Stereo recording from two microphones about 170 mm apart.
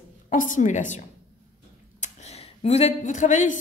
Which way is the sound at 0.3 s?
50° left (ahead or behind).